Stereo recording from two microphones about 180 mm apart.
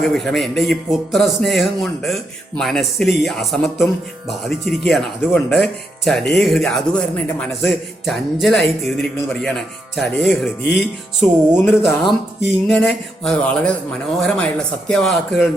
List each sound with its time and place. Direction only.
0.1 s a man's voice: centre (ahead or behind)
4.9 s a man's voice: centre (ahead or behind)